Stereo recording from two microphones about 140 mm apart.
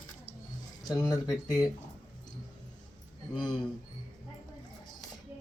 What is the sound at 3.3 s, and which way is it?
Speech, 30° left (ahead or behind).